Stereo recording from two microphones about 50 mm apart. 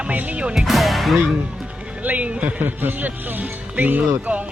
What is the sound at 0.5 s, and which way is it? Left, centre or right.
Speech, centre.